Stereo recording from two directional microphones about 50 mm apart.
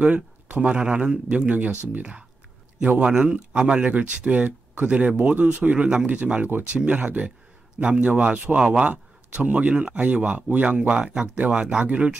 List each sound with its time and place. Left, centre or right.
0.0 s a man's voice: right